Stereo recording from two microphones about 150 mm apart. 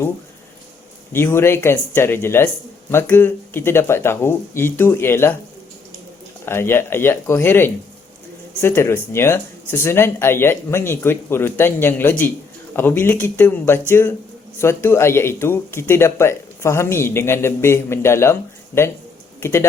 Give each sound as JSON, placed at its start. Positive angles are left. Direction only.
{"t": 1.1, "sound": "speech", "side_deg": 15}
{"t": 6.4, "sound": "speech", "side_deg": 15}